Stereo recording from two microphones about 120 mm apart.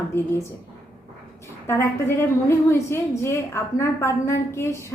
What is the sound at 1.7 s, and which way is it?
A woman's voice, 20° left (ahead or behind).